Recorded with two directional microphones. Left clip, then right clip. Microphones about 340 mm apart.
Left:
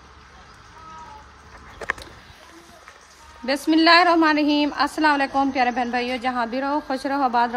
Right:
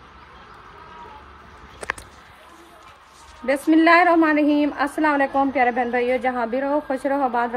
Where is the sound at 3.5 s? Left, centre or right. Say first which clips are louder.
Right 1 dB; centre.